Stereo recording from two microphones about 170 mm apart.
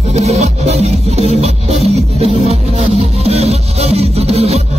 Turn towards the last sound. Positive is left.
turn(degrees=-35)  # may be behind; listen again after turning